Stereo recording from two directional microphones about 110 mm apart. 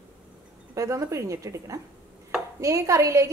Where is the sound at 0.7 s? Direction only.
30° right (ahead or behind).